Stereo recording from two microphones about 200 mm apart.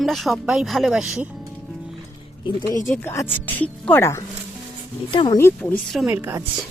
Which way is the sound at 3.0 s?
10° left (ahead or behind).